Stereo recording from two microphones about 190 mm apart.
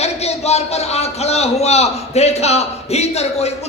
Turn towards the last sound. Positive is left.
turn(degrees=35)  # may be behind; listen again after turning